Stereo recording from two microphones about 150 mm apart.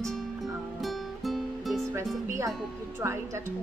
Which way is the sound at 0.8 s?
Centre (ahead or behind).